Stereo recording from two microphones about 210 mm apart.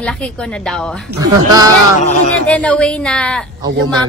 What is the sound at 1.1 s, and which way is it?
Speech, 15° right (ahead or behind).